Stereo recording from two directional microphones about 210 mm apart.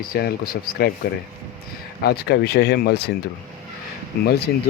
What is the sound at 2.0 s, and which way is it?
Speech, 50° left (ahead or behind).